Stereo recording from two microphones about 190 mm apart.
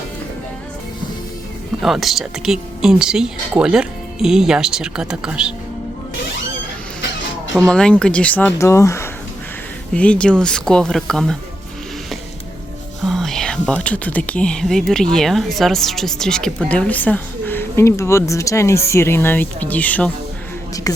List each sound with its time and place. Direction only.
1.8 s speech: centre (ahead or behind)
7.5 s speech: centre (ahead or behind)
13.0 s speech: centre (ahead or behind)
20.9 s a sound: 20° left (ahead or behind)